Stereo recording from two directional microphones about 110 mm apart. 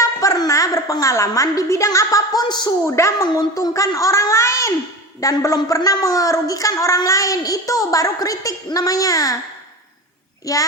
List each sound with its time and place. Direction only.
0.2 s a woman's voice: 30° left (ahead or behind)
2.8 s a child's voice: 25° left (ahead or behind)
10.4 s a woman's voice: 30° left (ahead or behind)